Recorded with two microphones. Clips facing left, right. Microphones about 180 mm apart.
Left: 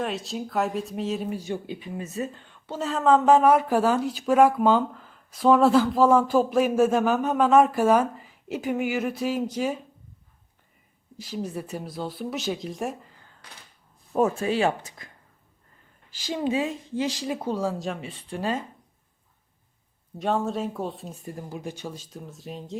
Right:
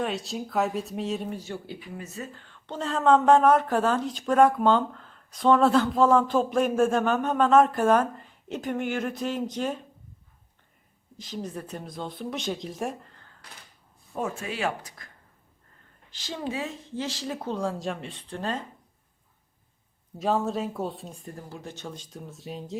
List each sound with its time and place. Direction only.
0.0 s speech: centre (ahead or behind)
1.4 s speech: 15° left (ahead or behind)
2.6 s a woman's voice: 5° left (ahead or behind)
11.2 s speech: 10° left (ahead or behind)
14.2 s speech: 35° left (ahead or behind)
16.1 s a woman's voice: 15° left (ahead or behind)
20.1 s speech: centre (ahead or behind)